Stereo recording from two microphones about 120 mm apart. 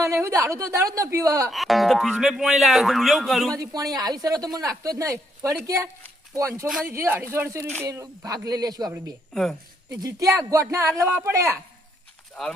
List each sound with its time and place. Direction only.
0.0 s speech: 25° right (ahead or behind)
1.5 s speech: centre (ahead or behind)
3.5 s speech: 30° right (ahead or behind)
9.3 s speech: 5° left (ahead or behind)
10.0 s speech: 30° right (ahead or behind)
12.3 s speech: 5° left (ahead or behind)